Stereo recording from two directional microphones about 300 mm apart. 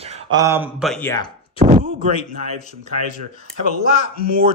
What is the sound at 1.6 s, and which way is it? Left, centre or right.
Speech, right.